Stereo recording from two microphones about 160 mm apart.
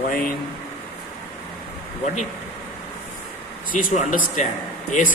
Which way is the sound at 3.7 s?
55° left (ahead or behind).